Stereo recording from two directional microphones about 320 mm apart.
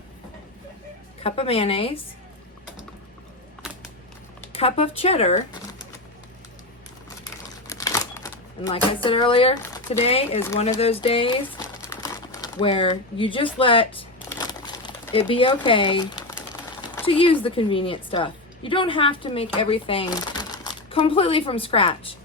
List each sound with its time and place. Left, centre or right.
1.2 s speech: centre
4.5 s speech: centre
7.7 s speech: centre
11.9 s crumpling: centre
16.8 s speech: centre